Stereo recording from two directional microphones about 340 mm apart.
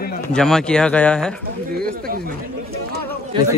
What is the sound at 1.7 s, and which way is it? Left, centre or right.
Speech, right.